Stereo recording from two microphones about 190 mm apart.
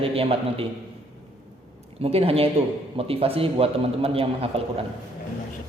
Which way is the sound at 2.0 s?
30° right (ahead or behind).